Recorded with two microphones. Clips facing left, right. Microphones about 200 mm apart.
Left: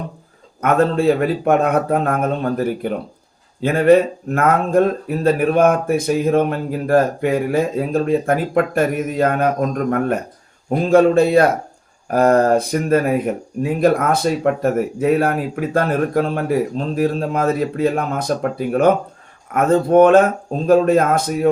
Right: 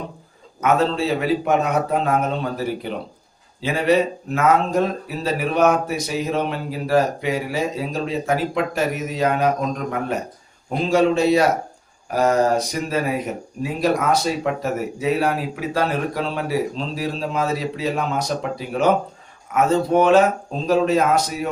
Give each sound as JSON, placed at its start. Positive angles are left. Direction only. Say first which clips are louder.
{"t": 0.6, "sound": "speech", "louder": "left 4 dB", "side_deg": 55}